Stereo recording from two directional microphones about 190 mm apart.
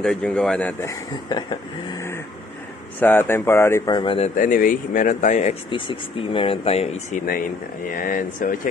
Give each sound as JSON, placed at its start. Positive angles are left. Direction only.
{"t": 0.0, "sound": "speech", "side_deg": 5}
{"t": 4.4, "sound": "speech", "side_deg": 45}